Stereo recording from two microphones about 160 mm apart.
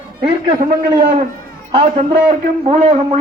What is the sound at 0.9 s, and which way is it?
Speech, 30° right (ahead or behind).